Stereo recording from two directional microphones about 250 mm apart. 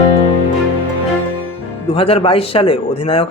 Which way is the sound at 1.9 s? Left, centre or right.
Left.